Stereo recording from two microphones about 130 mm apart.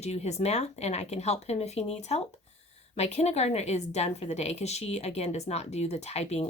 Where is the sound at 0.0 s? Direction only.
55° left (ahead or behind).